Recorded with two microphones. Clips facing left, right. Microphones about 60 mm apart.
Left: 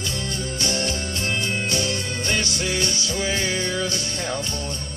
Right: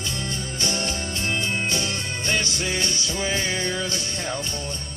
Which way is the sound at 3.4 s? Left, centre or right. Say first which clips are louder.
Left 2 dB; centre.